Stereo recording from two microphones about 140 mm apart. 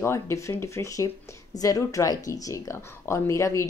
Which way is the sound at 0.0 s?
20° left (ahead or behind).